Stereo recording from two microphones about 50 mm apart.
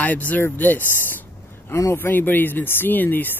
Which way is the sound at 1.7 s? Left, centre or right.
Left.